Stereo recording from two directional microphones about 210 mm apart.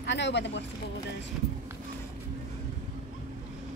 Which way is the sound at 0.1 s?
55° left (ahead or behind).